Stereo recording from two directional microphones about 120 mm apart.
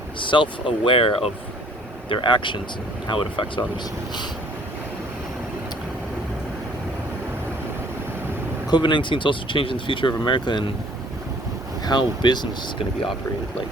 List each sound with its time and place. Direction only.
0.2 s speech: 45° left (ahead or behind)
8.7 s speech: 40° left (ahead or behind)
11.9 s speech: 35° left (ahead or behind)